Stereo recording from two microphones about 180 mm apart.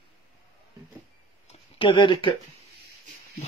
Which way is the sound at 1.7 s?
30° left (ahead or behind).